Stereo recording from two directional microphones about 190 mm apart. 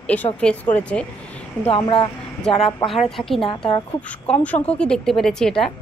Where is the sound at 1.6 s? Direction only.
30° left (ahead or behind).